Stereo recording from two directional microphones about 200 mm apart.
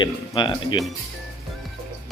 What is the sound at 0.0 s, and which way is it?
Speech, 25° left (ahead or behind).